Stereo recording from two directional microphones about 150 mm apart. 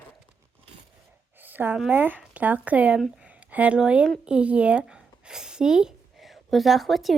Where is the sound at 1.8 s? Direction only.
10° right (ahead or behind).